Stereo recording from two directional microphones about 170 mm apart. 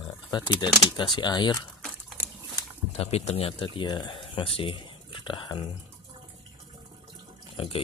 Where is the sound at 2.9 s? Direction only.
35° left (ahead or behind).